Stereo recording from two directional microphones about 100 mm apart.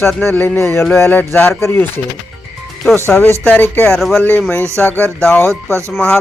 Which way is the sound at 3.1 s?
20° left (ahead or behind).